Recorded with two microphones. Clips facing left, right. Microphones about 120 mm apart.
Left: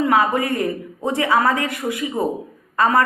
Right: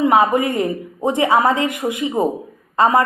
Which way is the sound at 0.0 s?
20° right (ahead or behind).